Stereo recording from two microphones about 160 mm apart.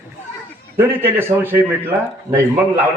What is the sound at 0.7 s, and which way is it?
Speech, 15° right (ahead or behind).